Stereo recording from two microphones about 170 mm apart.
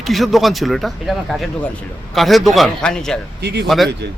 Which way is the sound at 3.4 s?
75° right (ahead or behind).